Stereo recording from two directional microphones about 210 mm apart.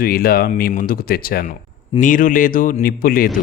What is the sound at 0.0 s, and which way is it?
Speech, 45° left (ahead or behind).